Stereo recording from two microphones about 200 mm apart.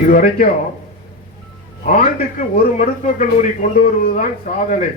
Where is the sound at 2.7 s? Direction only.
40° left (ahead or behind).